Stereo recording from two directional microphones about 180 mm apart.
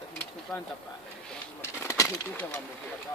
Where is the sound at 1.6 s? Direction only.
15° left (ahead or behind).